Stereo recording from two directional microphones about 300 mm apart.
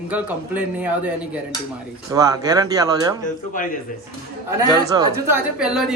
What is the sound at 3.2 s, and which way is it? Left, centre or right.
Speech, left.